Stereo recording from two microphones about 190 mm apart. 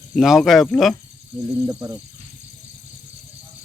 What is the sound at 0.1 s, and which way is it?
Speech, centre (ahead or behind).